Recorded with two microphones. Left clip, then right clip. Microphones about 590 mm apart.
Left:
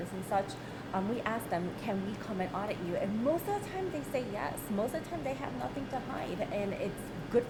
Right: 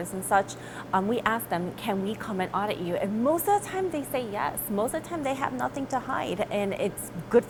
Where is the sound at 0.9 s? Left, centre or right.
Right.